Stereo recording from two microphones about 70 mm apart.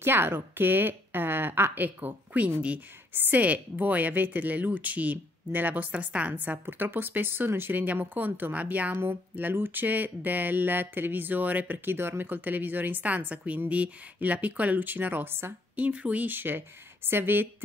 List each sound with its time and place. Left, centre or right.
0.0 s a woman's voice: right
15.7 s a woman's voice: centre